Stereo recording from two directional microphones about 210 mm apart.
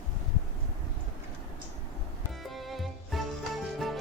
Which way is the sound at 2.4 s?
Centre (ahead or behind).